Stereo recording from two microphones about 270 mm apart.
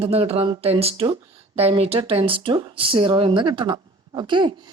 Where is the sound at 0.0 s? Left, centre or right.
Right.